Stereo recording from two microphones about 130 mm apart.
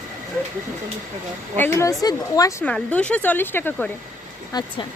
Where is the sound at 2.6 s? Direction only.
10° left (ahead or behind).